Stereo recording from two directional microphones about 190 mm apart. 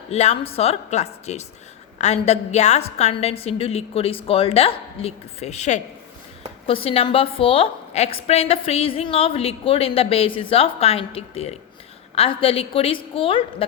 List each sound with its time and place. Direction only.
0.1 s a woman's voice: 35° left (ahead or behind)